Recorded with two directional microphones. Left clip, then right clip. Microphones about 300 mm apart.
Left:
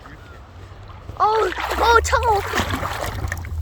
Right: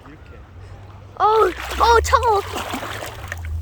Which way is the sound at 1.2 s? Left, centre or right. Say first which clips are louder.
Right 2 dB; centre.